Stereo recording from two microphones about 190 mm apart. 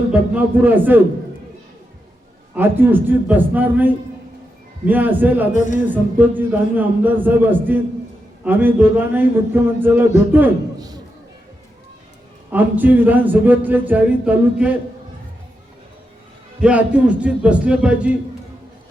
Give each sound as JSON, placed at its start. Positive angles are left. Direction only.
{"t": 0.1, "sound": "speech", "side_deg": -10}
{"t": 2.6, "sound": "speech", "side_deg": -10}
{"t": 5.5, "sound": "a sound", "side_deg": 40}
{"t": 5.9, "sound": "speech", "side_deg": -10}
{"t": 10.8, "sound": "a sound", "side_deg": -20}
{"t": 12.5, "sound": "speech", "side_deg": -10}
{"t": 16.6, "sound": "speech", "side_deg": -5}